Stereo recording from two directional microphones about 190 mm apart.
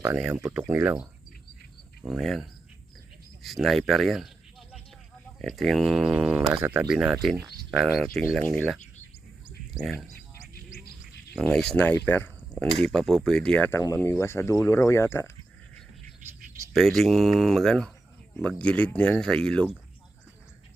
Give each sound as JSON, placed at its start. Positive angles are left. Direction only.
{"t": 0.0, "sound": "speech", "side_deg": -10}
{"t": 2.0, "sound": "speech", "side_deg": 0}
{"t": 5.4, "sound": "speech", "side_deg": 0}
{"t": 8.0, "sound": "speech", "side_deg": 10}
{"t": 9.8, "sound": "speech", "side_deg": 0}
{"t": 10.5, "sound": "insect", "side_deg": 55}
{"t": 11.3, "sound": "speech", "side_deg": 0}
{"t": 16.7, "sound": "speech", "side_deg": 0}